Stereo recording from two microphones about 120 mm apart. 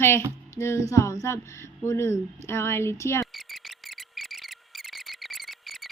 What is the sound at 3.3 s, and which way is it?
Cricket, centre (ahead or behind).